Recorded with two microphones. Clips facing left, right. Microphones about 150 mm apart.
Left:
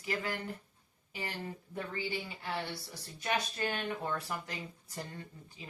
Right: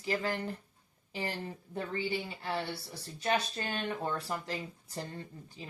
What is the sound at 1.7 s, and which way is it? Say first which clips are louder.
Speech: right 4 dB; 30° right (ahead or behind).